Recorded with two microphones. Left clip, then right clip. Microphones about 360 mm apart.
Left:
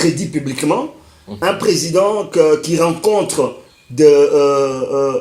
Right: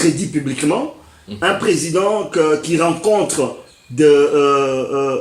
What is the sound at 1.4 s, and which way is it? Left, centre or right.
Speech, centre.